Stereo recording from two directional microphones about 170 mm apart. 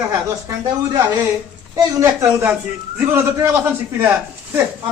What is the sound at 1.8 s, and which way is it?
Speech, 15° right (ahead or behind).